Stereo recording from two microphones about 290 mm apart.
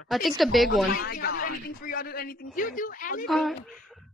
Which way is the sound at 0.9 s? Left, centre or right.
Left.